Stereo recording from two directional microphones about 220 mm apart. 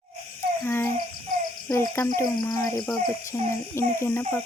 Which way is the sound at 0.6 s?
10° left (ahead or behind).